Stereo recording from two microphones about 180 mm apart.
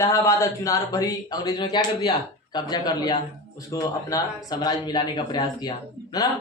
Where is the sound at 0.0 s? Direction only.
15° left (ahead or behind).